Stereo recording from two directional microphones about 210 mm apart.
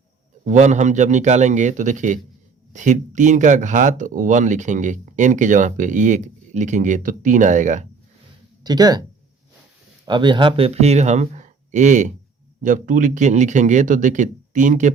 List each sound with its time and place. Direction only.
0.4 s speech: 35° right (ahead or behind)
8.6 s speech: 20° right (ahead or behind)
10.1 s speech: 20° right (ahead or behind)